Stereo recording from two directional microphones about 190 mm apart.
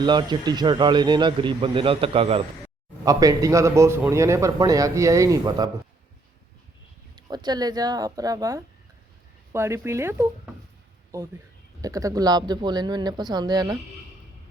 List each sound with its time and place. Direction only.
0.0 s speech: 25° right (ahead or behind)
3.0 s a man's voice: 20° right (ahead or behind)
7.2 s a man's voice: 20° right (ahead or behind)
11.8 s speech: 20° right (ahead or behind)